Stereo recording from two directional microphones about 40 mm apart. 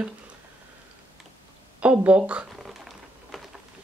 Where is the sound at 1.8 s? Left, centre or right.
Right.